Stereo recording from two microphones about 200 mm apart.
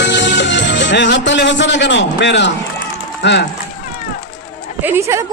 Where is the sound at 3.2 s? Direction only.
60° left (ahead or behind).